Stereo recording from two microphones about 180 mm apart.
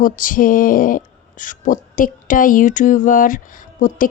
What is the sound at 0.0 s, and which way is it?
Speech, 50° left (ahead or behind).